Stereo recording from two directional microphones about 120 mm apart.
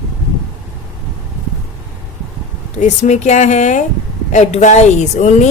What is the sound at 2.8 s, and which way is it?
Speech, 80° left.